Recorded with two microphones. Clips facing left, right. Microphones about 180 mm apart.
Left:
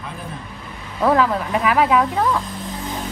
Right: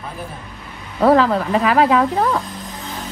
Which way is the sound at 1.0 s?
30° right (ahead or behind).